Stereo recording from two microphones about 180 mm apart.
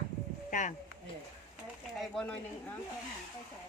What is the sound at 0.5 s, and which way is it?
Speech, 45° left (ahead or behind).